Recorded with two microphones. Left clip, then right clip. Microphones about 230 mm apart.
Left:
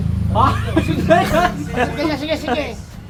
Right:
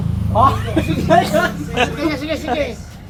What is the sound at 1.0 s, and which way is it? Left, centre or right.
Speech, left.